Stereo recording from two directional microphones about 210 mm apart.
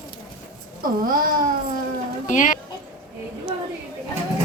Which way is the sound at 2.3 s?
40° left (ahead or behind).